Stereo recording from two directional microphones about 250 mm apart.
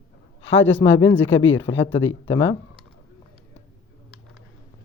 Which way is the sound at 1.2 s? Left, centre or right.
Left.